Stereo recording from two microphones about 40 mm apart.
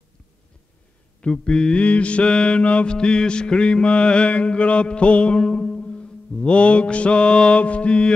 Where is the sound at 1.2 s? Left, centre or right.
Left.